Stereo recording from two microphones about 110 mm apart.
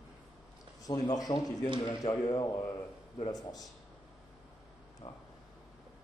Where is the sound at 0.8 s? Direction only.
35° left (ahead or behind).